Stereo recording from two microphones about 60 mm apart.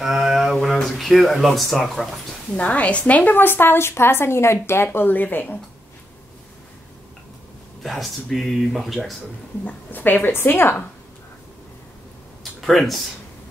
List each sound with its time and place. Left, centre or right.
0.0 s speech: centre
2.5 s a woman's voice: left
3.3 s speech: left
7.8 s speech: centre
9.7 s speech: left
12.5 s speech: centre